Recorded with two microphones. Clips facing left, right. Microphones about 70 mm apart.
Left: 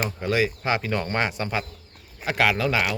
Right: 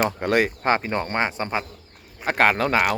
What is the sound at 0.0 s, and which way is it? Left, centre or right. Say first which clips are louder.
Speech: right 3 dB; right.